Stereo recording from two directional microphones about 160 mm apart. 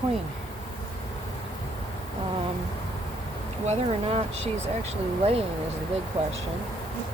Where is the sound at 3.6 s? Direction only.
40° right (ahead or behind).